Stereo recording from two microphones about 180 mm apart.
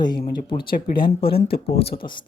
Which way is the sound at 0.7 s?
55° left (ahead or behind).